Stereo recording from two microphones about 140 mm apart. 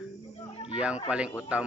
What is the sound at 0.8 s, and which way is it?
Speech, 10° right (ahead or behind).